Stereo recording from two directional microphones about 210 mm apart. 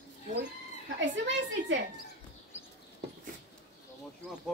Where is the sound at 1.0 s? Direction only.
60° right (ahead or behind).